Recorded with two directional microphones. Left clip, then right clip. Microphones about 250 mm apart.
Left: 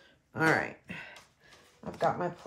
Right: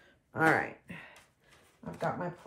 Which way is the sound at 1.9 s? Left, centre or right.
Left.